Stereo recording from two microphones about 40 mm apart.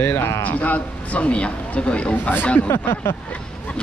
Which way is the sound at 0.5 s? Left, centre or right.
Left.